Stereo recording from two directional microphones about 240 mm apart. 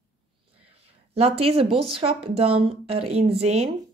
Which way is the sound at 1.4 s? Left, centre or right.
Right.